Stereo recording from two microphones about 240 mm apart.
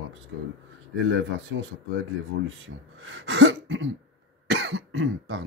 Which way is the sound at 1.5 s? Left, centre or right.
Right.